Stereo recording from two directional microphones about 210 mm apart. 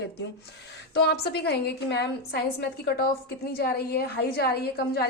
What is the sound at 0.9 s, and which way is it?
A woman's voice, 50° left (ahead or behind).